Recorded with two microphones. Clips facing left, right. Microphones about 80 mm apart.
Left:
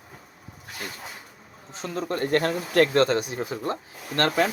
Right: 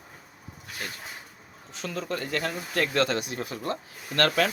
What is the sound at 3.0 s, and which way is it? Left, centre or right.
Speech, left.